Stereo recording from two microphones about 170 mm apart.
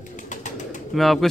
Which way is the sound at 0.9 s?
Centre (ahead or behind).